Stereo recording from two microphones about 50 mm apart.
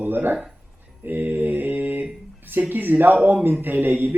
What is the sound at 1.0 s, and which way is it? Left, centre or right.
Mantra, right.